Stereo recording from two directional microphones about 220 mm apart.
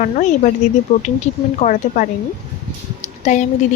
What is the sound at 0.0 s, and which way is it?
Speech, 35° left (ahead or behind).